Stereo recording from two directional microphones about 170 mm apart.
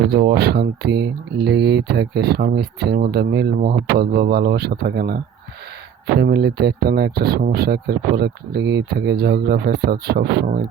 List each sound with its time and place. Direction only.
0.0 s speech: 75° right (ahead or behind)